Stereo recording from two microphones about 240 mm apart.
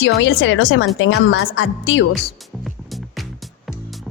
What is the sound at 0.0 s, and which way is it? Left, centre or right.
Speech, left.